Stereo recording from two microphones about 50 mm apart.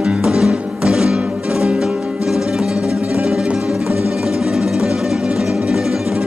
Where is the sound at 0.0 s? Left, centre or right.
Centre.